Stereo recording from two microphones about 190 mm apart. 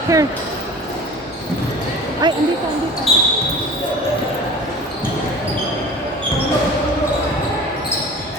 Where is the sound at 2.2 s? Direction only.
20° right (ahead or behind).